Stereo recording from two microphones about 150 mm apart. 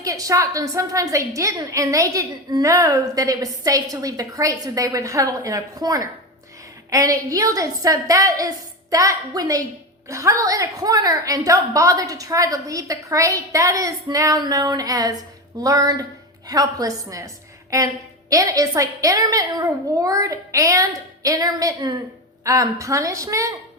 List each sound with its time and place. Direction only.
0.0 s a woman's voice: 20° right (ahead or behind)